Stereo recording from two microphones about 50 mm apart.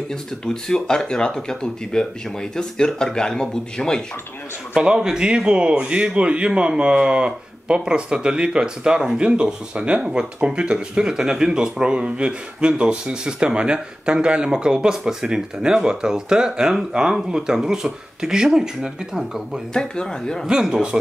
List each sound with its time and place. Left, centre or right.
0.1 s speech: centre
4.7 s a man's voice: centre
19.7 s speech: centre
20.4 s speech: centre